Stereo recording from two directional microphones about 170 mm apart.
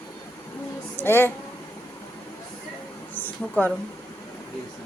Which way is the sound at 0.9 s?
15° left (ahead or behind).